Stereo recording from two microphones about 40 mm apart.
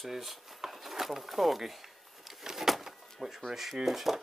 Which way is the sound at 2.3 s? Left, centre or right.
Centre.